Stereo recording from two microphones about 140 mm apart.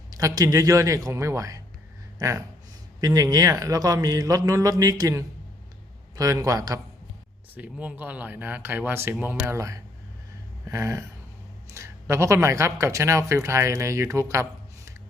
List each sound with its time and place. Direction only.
0.1 s speech: 25° right (ahead or behind)
7.5 s speech: 10° right (ahead or behind)